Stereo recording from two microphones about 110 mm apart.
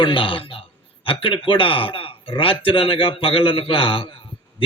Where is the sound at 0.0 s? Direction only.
50° left (ahead or behind).